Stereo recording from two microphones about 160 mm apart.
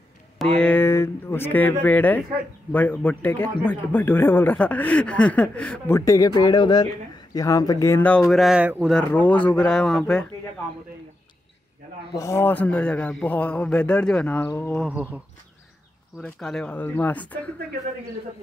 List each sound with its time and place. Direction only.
0.4 s speech: 5° left (ahead or behind)
5.9 s speech: 20° left (ahead or behind); by 8.9 s 10° right (ahead or behind)
8.9 s speech: 10° left (ahead or behind)
12.1 s speech: 20° left (ahead or behind)
14.9 s speech: 10° right (ahead or behind)
16.2 s speech: 5° left (ahead or behind)